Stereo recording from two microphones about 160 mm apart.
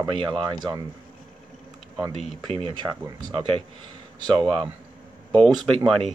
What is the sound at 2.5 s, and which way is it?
Speech, 35° right (ahead or behind).